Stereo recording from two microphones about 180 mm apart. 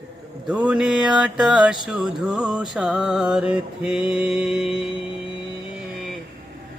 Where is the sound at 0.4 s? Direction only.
5° right (ahead or behind).